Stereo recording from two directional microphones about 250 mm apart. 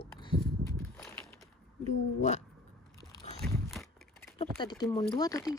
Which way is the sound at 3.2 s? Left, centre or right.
Left.